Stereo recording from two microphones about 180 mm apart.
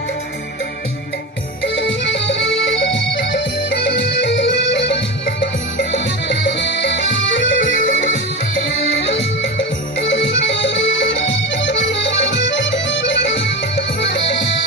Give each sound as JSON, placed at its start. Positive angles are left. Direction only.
{"t": 1.6, "sound": "music", "side_deg": 85}
{"t": 8.6, "sound": "music", "side_deg": 85}